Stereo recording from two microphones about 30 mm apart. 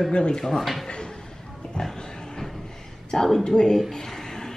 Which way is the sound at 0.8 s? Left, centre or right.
Left.